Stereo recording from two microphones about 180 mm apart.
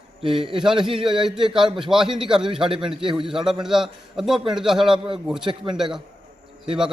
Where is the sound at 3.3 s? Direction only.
5° right (ahead or behind).